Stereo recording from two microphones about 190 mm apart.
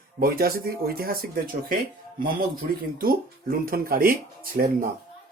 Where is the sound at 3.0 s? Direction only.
50° right (ahead or behind).